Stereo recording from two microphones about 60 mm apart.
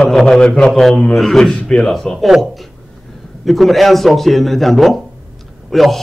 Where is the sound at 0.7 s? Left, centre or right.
Centre.